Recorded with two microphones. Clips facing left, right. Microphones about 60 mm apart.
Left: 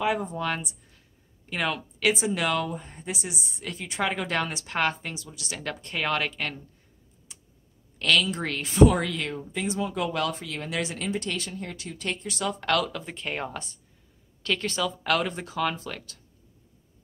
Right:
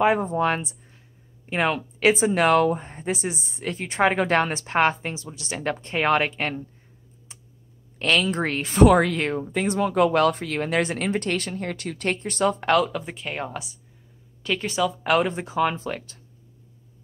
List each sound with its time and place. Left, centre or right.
0.0 s a woman's voice: right
8.0 s speech: right
8.8 s speech: right
9.1 s speech: right
12.5 s speech: right
13.1 s speech: centre; by 16.2 s right